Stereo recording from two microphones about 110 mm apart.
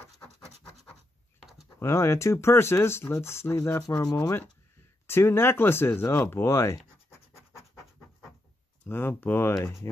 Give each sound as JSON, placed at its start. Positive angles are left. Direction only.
{"t": 1.8, "sound": "speech", "side_deg": 25}
{"t": 5.0, "sound": "speech", "side_deg": 20}
{"t": 7.1, "sound": "scratch", "side_deg": 25}
{"t": 8.8, "sound": "speech", "side_deg": 20}